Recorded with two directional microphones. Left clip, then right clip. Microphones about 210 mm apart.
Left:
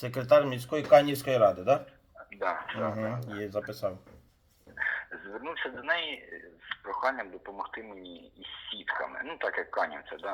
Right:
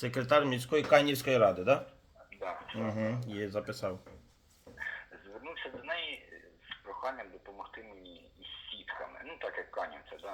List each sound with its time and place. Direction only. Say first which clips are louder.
0.0 s speech: left 5 dB; 10° right (ahead or behind)
2.3 s a sound: left 8 dB; 30° left (ahead or behind)
3.3 s speech: left 2 dB; 10° right (ahead or behind)
4.8 s a man's voice: left 9 dB; 30° left (ahead or behind)